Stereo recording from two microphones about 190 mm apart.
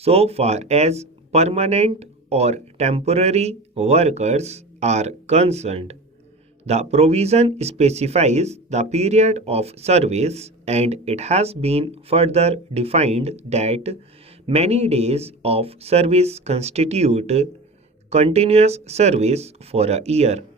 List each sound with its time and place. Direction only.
0.0 s speech: 30° right (ahead or behind)